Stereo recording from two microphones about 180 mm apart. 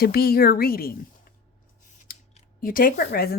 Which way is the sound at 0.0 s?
60° left (ahead or behind).